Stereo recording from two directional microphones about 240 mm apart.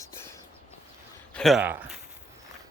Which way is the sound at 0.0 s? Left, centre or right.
Centre.